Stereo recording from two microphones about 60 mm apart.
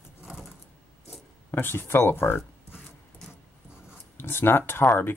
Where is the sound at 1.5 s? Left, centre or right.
Left.